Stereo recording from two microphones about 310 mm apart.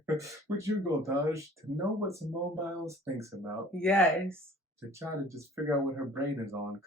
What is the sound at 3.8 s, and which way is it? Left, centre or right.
Mantra, centre.